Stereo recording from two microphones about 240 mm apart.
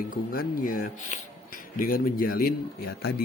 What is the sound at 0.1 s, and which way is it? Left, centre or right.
Speech, left.